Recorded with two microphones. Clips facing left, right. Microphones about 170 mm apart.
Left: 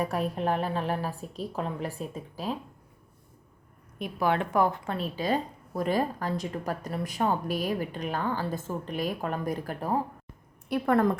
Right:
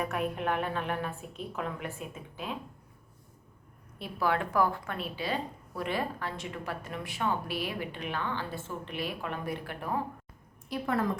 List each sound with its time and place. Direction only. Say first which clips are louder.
0.0 s a woman's voice: left 3 dB; 35° left (ahead or behind)
3.9 s a woman's voice: left 3 dB; 20° left (ahead or behind)
4.9 s a woman's voice: left 5 dB; 40° left (ahead or behind)
10.7 s a woman's voice: left 7 dB; 55° left (ahead or behind)